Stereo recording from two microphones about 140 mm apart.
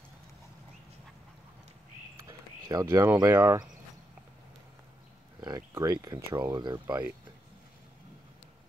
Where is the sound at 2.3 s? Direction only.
25° right (ahead or behind).